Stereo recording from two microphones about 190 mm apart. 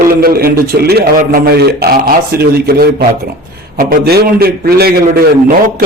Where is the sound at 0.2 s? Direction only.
50° right (ahead or behind).